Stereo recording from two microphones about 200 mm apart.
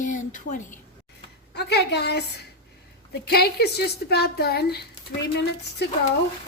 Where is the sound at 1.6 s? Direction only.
55° left (ahead or behind).